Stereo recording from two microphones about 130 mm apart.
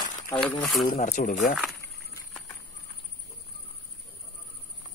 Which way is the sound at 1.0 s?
90° left.